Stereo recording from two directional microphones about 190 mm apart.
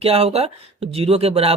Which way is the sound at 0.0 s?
30° right (ahead or behind).